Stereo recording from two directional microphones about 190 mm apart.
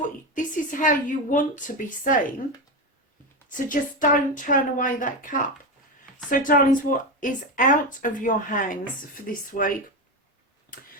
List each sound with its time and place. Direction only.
0.3 s a woman's voice: 45° left (ahead or behind)
3.7 s speech: 45° left (ahead or behind)